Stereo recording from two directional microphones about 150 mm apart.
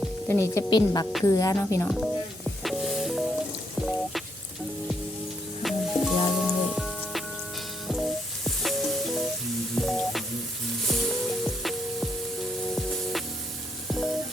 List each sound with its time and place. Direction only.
0.3 s speech: 15° left (ahead or behind)
0.7 s speech: 25° left (ahead or behind)
1.9 s music: centre (ahead or behind)
5.6 s music: centre (ahead or behind)
13.8 s sizzle: centre (ahead or behind)